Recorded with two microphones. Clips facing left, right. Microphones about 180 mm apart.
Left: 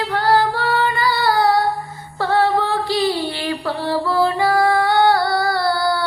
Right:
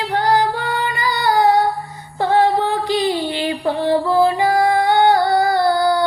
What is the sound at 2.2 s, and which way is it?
Music, 15° right (ahead or behind).